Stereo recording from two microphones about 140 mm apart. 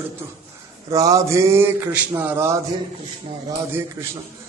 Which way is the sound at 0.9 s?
25° right (ahead or behind).